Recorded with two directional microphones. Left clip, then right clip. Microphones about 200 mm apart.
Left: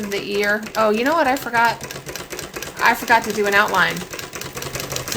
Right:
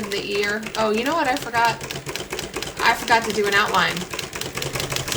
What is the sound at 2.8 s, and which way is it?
Speech, 40° left (ahead or behind).